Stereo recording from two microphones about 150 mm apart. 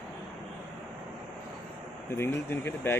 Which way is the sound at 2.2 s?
15° left (ahead or behind).